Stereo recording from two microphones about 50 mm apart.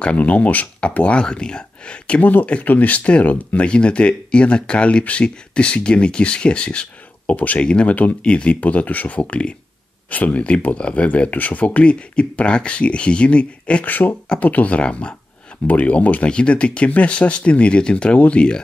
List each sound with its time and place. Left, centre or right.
0.0 s speech: left
13.8 s speech: left